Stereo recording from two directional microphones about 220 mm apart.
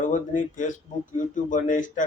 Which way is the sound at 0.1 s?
35° left (ahead or behind).